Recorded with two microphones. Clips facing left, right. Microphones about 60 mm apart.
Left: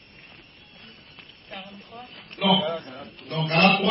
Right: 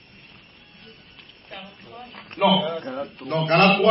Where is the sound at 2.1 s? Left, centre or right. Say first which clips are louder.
Right 5 dB; right.